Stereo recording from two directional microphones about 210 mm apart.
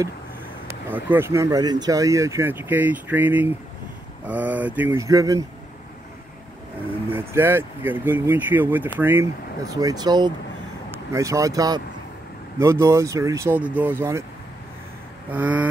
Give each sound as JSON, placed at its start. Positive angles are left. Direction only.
{"t": 0.8, "sound": "speech", "side_deg": -10}
{"t": 7.1, "sound": "speech", "side_deg": -10}
{"t": 15.3, "sound": "speech", "side_deg": -5}